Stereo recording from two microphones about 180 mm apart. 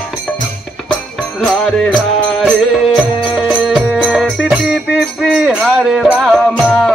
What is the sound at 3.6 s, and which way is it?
Music, 5° right (ahead or behind).